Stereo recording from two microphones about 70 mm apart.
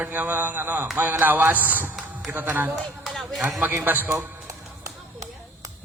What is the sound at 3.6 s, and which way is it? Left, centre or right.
Speech, right.